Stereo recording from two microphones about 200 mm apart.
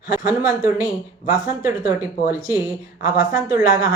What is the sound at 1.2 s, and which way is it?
Speech, 45° left (ahead or behind).